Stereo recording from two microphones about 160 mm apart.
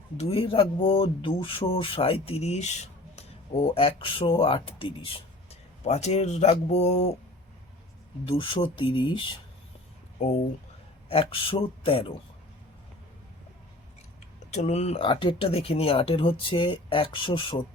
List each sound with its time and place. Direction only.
0.2 s speech: 35° left (ahead or behind)
8.3 s speech: 30° left (ahead or behind)
10.2 s speech: 45° left (ahead or behind)
11.1 s speech: 35° left (ahead or behind)
14.5 s speech: 45° left (ahead or behind)